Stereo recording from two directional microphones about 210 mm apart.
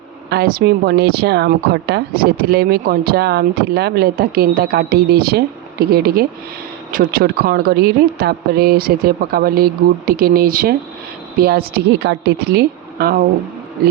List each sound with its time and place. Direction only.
0.3 s speech: 45° right (ahead or behind)